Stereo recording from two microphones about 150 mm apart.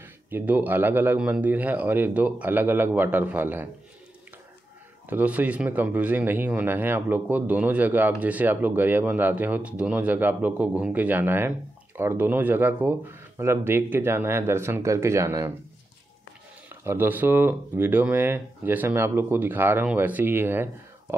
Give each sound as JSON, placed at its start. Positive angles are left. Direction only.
{"t": 0.0, "sound": "speech", "side_deg": -15}
{"t": 5.1, "sound": "speech", "side_deg": -10}
{"t": 16.8, "sound": "speech", "side_deg": -15}